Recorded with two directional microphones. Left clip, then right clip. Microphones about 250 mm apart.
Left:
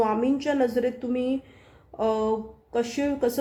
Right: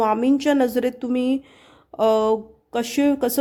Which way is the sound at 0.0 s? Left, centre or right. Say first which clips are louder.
Right 5 dB; right.